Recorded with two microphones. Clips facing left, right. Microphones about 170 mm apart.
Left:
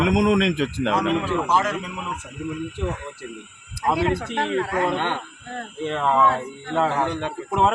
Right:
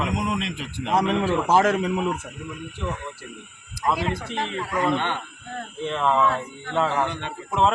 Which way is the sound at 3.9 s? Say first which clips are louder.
Left 4 dB; 60° left (ahead or behind).